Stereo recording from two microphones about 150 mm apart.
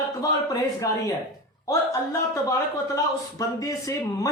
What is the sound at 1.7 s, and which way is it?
Speech, 20° left (ahead or behind).